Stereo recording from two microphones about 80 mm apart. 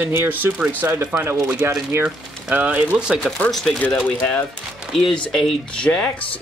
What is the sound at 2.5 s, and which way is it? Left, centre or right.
Speech, centre.